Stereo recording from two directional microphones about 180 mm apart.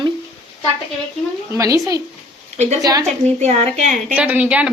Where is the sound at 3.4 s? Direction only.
40° right (ahead or behind).